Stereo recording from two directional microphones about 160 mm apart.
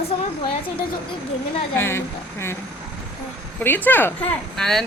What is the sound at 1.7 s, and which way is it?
Speech, 15° left (ahead or behind).